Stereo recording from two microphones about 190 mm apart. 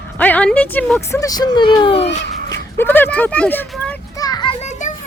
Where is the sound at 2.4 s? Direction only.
15° left (ahead or behind).